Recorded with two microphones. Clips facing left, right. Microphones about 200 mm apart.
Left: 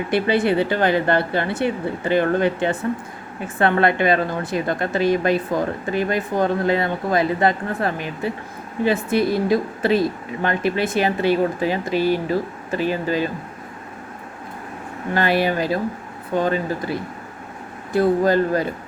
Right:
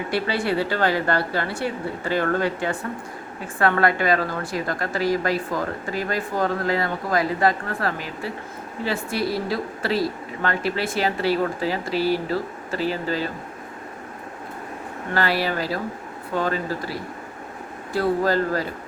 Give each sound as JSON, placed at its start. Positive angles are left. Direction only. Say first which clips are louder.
{"t": 0.1, "sound": "a woman's voice", "louder": "left 6 dB", "side_deg": 20}
{"t": 15.1, "sound": "a woman's voice", "louder": "left 4 dB", "side_deg": 20}